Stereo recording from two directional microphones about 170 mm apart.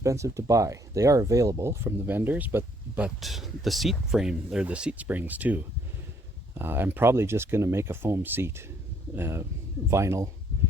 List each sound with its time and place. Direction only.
0.0 s speech: 20° right (ahead or behind)